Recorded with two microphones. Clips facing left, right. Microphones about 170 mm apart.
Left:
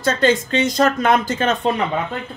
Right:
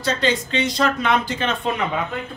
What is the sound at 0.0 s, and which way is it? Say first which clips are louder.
Speech: left 4 dB; 50° left (ahead or behind).